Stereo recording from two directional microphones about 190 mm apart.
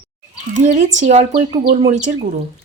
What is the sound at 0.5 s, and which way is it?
Speech, 40° right (ahead or behind).